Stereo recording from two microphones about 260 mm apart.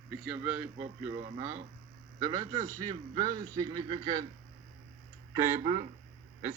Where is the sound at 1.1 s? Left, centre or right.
Right.